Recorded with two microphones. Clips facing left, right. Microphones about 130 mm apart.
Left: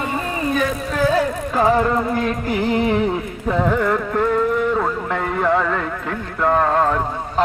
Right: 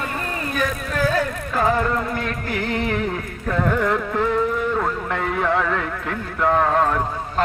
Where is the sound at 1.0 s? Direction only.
15° left (ahead or behind).